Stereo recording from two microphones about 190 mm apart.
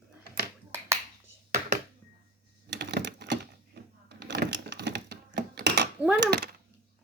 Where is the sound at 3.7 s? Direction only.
60° right (ahead or behind).